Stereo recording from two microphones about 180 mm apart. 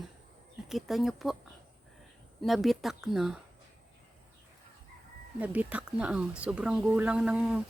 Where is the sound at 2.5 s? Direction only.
Centre (ahead or behind).